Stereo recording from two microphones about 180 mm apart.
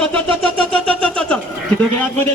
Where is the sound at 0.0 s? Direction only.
5° left (ahead or behind).